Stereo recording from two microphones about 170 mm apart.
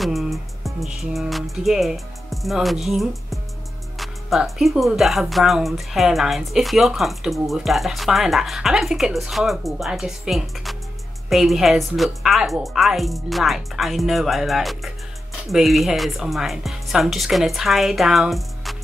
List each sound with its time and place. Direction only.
0.0 s music: centre (ahead or behind)
2.4 s speech: centre (ahead or behind)